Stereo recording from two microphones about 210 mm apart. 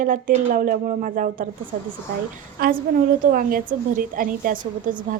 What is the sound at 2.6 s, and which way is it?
A woman's voice, 45° right (ahead or behind).